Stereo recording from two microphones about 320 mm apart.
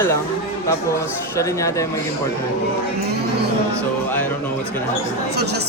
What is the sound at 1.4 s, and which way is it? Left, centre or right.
Speech, centre.